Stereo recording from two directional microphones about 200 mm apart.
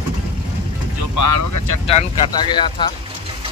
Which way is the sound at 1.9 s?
25° left (ahead or behind).